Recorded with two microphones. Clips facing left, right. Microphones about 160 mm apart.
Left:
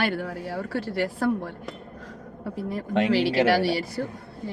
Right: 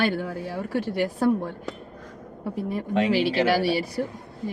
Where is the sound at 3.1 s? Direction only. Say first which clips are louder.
Left 1 dB; 15° right (ahead or behind).